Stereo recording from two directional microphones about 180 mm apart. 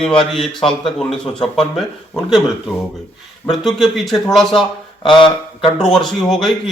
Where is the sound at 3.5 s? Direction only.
Centre (ahead or behind).